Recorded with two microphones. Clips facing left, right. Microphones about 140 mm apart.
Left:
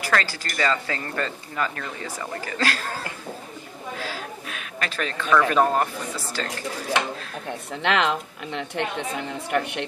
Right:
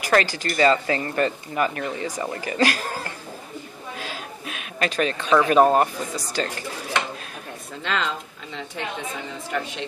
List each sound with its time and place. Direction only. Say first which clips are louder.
0.0 s speech: right 4 dB; 20° right (ahead or behind)
4.0 s a sound: even; 20° right (ahead or behind)
5.5 s speech: right 4 dB; 20° right (ahead or behind)
7.8 s a woman's voice: left 4 dB; 70° left (ahead or behind)